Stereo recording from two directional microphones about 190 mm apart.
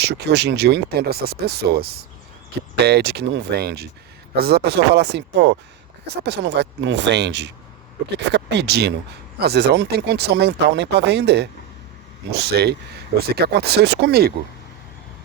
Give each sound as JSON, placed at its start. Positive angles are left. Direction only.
{"t": 0.0, "sound": "speech", "side_deg": -60}